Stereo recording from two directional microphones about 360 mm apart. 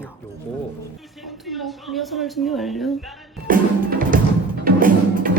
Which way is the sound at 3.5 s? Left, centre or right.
Right.